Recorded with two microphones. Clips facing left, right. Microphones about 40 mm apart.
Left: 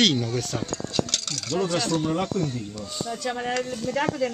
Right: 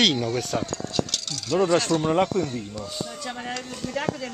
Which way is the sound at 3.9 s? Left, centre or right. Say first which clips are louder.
Left 3 dB; centre.